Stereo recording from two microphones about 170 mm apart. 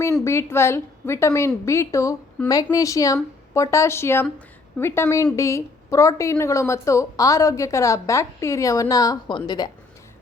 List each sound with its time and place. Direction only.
0.0 s a woman's voice: 15° left (ahead or behind)